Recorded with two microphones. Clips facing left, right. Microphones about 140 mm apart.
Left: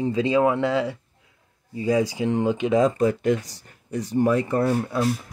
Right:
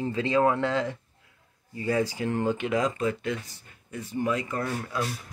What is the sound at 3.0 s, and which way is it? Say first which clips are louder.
Speech: left 8 dB; 40° left (ahead or behind).